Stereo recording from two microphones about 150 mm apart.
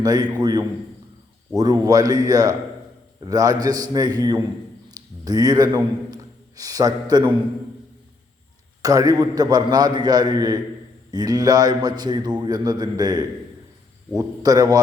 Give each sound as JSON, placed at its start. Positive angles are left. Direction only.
{"t": 0.0, "sound": "a man's voice", "side_deg": -25}
{"t": 8.8, "sound": "a man's voice", "side_deg": -20}